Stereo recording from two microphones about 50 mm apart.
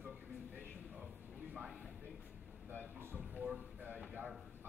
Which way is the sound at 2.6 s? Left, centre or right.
Right.